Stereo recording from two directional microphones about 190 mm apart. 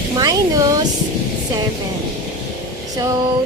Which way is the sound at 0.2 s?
20° right (ahead or behind).